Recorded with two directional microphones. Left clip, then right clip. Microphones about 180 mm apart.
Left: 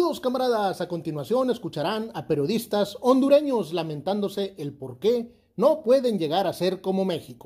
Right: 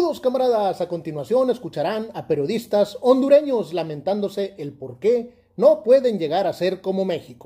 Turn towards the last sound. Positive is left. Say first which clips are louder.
# right 3 dB
turn(degrees=30)  # may be behind; listen again after turning